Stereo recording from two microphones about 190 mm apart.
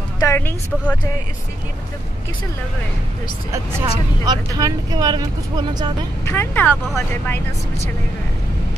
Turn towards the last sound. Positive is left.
turn(degrees=10)  # may be behind; listen again after turning